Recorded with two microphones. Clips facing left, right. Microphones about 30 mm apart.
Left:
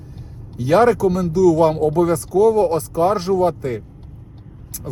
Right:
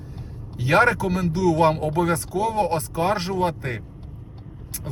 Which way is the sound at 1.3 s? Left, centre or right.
Right.